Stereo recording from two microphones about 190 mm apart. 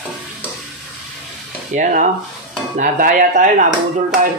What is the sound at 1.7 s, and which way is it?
Speech, 40° right (ahead or behind).